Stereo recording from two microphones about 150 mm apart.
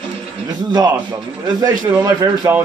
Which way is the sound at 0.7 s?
30° right (ahead or behind).